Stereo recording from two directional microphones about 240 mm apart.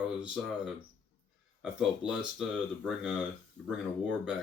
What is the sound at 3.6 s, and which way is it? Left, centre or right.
Speech, centre.